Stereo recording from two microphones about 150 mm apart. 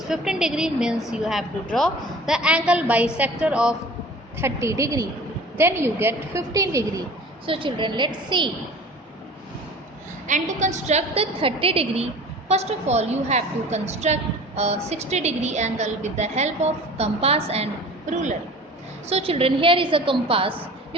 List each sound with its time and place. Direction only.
0.1 s a woman's voice: 5° right (ahead or behind)
4.4 s a woman's voice: 20° right (ahead or behind)
7.4 s a woman's voice: 35° right (ahead or behind)
10.2 s a woman's voice: 55° right (ahead or behind)
19.0 s a woman's voice: 40° right (ahead or behind)